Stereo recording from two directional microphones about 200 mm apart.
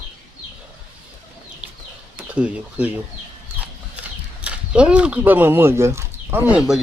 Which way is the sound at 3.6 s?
5° right (ahead or behind).